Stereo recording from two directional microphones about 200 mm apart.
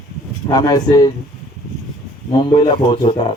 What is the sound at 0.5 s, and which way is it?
Speech, 20° left (ahead or behind).